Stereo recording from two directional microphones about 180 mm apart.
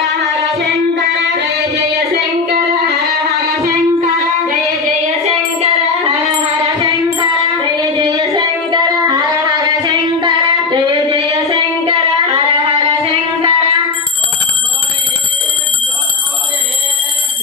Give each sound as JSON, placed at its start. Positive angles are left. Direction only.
{"t": 5.6, "sound": "music", "side_deg": -35}
{"t": 7.2, "sound": "music", "side_deg": -20}
{"t": 8.8, "sound": "singing", "side_deg": -20}
{"t": 13.0, "sound": "music", "side_deg": -35}